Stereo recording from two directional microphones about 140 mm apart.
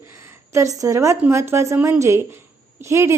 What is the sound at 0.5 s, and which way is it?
A woman's voice, 25° right (ahead or behind).